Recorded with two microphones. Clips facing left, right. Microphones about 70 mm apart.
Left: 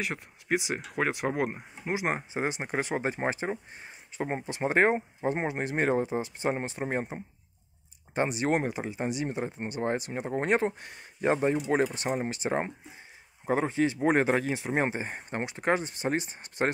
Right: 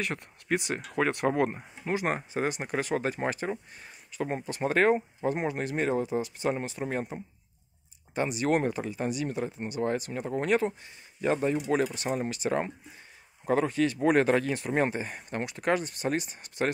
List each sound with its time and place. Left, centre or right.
0.0 s speech: centre; by 5.8 s left
5.8 s speech: left
8.5 s speech: centre; by 10.7 s left
10.8 s speech: left
11.4 s speech: left